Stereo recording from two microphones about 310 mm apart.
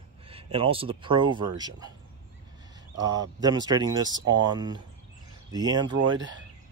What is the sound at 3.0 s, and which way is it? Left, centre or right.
A man's voice, centre.